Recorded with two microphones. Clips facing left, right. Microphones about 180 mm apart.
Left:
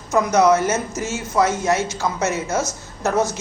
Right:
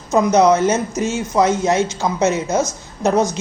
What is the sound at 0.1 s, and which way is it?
A woman's voice, 20° right (ahead or behind).